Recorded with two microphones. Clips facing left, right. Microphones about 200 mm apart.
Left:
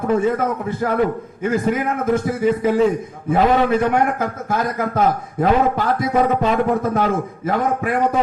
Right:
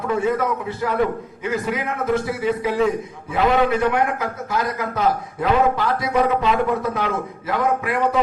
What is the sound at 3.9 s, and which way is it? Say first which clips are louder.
A man's voice: left 3 dB; 50° left (ahead or behind).